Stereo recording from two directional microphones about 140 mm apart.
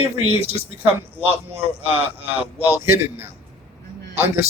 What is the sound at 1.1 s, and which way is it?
Speech, 45° right (ahead or behind).